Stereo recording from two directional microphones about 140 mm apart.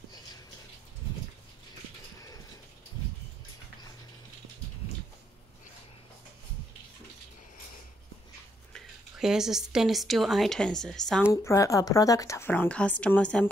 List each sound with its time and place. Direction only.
8.7 s a woman's voice: 5° right (ahead or behind)
11.4 s a woman's voice: 20° left (ahead or behind)